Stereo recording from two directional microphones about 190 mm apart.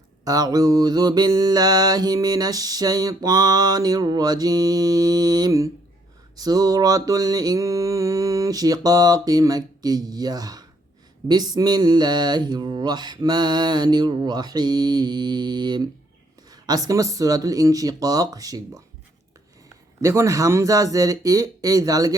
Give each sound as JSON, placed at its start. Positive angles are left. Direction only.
{"t": 0.3, "sound": "mantra", "side_deg": -20}
{"t": 20.0, "sound": "speech", "side_deg": -15}